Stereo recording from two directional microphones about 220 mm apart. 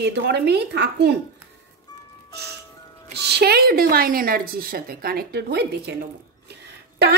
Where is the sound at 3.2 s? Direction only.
50° right (ahead or behind).